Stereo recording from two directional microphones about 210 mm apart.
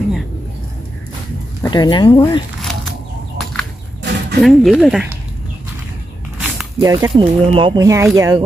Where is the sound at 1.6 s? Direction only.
20° left (ahead or behind).